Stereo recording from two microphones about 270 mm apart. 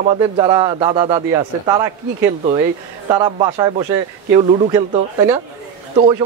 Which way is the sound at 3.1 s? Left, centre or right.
Centre.